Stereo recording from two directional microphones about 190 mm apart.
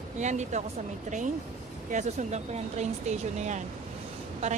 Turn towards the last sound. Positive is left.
turn(degrees=-35)  # may be behind; listen again after turning